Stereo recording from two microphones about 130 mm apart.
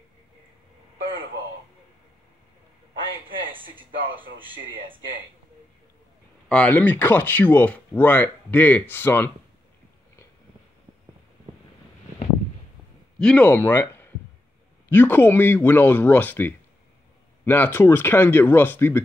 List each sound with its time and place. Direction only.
3.3 s speech: 40° right (ahead or behind)
6.5 s speech: 10° left (ahead or behind)
13.2 s speech: 10° left (ahead or behind)